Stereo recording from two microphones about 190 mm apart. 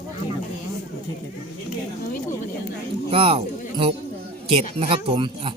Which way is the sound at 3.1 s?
30° right (ahead or behind).